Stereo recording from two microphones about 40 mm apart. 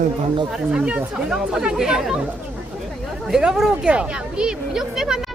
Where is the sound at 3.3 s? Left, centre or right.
Centre.